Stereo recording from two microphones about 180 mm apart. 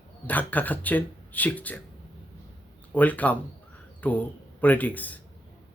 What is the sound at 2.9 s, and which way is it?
Speech, 10° left (ahead or behind).